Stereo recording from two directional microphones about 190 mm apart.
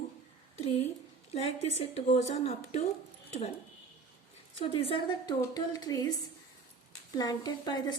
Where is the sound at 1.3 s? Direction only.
35° left (ahead or behind).